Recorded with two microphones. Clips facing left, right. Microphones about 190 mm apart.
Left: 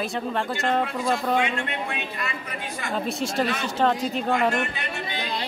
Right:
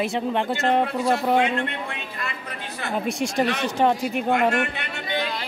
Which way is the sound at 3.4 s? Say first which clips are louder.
Right 3 dB; 70° right (ahead or behind).